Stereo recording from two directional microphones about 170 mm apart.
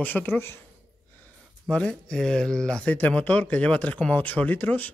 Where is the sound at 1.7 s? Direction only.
5° left (ahead or behind).